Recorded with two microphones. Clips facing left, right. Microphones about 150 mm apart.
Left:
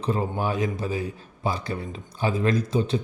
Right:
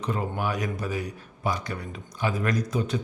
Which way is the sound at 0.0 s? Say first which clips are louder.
Left 3 dB; 30° left (ahead or behind).